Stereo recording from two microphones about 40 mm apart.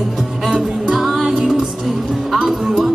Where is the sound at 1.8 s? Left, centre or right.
Centre.